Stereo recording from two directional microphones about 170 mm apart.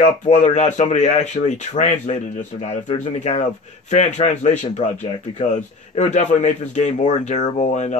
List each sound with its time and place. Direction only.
0.0 s speech: 45° left (ahead or behind)